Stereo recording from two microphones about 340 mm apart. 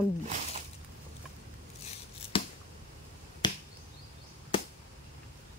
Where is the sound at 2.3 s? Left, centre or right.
Centre.